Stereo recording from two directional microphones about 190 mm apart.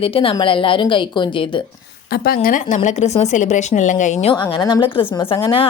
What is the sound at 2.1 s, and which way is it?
Speech, 50° left (ahead or behind).